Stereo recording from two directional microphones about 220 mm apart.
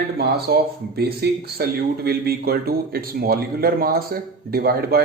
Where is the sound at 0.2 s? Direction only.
45° right (ahead or behind).